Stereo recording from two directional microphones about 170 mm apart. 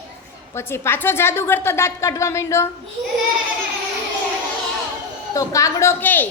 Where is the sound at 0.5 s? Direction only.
15° left (ahead or behind).